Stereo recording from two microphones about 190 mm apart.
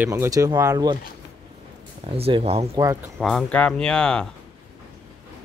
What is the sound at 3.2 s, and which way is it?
Speech, centre (ahead or behind).